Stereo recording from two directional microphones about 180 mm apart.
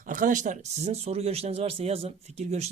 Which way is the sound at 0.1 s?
45° right (ahead or behind).